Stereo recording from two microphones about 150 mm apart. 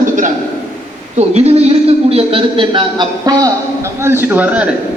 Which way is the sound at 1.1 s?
45° right (ahead or behind).